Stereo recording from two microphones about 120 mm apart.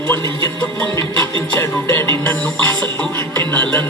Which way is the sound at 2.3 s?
10° left (ahead or behind).